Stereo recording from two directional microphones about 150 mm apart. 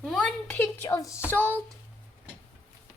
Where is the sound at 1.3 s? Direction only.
10° left (ahead or behind).